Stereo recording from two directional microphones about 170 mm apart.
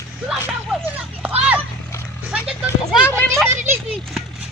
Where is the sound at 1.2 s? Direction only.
10° right (ahead or behind).